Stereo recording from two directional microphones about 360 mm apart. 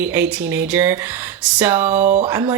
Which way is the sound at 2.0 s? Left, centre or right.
Centre.